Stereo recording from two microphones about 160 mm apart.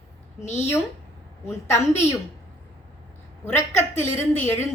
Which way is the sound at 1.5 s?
15° left (ahead or behind).